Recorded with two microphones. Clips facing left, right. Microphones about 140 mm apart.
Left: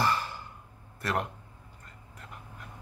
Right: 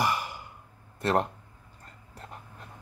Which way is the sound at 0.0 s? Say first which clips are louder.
Even; 15° right (ahead or behind).